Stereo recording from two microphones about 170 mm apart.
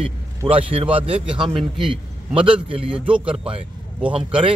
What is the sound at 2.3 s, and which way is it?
Speech, 30° right (ahead or behind).